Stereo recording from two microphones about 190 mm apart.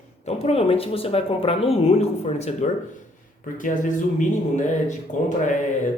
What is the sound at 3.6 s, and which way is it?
Speech, 40° left (ahead or behind).